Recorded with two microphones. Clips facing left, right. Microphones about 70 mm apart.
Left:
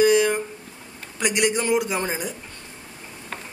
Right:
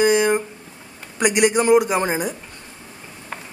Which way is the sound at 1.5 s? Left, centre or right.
Centre.